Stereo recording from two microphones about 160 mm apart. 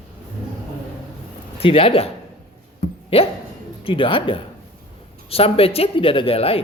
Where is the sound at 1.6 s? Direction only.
35° left (ahead or behind).